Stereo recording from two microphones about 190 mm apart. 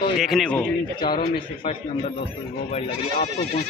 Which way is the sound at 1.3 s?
25° left (ahead or behind).